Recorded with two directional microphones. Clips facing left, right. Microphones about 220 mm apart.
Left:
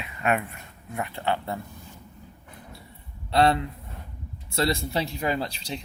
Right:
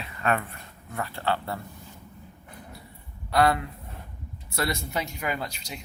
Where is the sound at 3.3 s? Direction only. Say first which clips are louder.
Left 1 dB; 25° left (ahead or behind).